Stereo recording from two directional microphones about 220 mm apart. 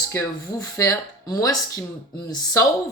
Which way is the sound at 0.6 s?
15° left (ahead or behind).